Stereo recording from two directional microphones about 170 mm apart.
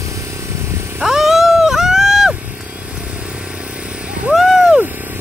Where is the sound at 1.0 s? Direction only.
Centre (ahead or behind).